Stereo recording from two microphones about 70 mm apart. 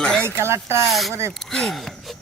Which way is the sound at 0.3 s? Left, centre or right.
Right.